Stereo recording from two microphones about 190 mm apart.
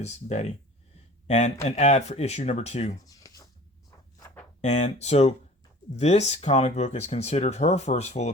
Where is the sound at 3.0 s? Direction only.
20° left (ahead or behind).